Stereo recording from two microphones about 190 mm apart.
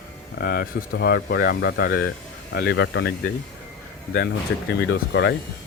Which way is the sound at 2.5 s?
70° left (ahead or behind).